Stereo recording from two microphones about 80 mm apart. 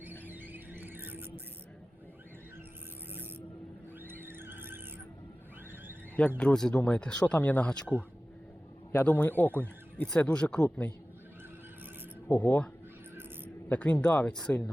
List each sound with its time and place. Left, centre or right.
0.0 s a sound: right
4.0 s squeal: right
6.1 s speech: centre
8.9 s a man's voice: left
12.3 s speech: centre